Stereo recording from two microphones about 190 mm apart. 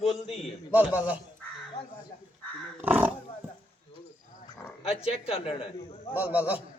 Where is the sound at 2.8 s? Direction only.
10° right (ahead or behind).